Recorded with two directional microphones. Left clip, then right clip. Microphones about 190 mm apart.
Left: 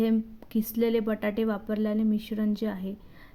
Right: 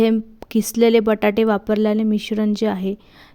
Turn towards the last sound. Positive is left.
turn(degrees=-55)  # may be behind; listen again after turning